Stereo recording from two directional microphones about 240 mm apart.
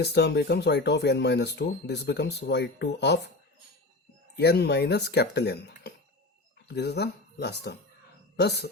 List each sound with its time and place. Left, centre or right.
0.0 s speech: left
4.4 s speech: left